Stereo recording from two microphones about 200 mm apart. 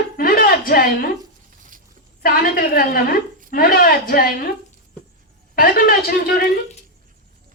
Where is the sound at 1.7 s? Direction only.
40° right (ahead or behind).